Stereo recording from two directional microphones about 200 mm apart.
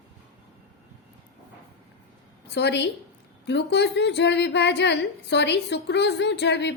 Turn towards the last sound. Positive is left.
turn(degrees=60)  # may be behind; listen again after turning